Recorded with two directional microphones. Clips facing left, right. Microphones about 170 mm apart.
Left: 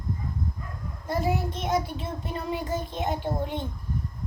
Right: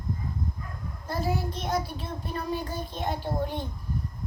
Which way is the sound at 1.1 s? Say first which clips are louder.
Left 3 dB; 20° left (ahead or behind).